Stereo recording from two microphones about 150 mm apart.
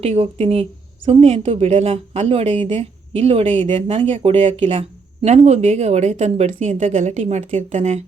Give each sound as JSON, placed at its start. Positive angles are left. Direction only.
{"t": 0.0, "sound": "a woman's voice", "side_deg": -45}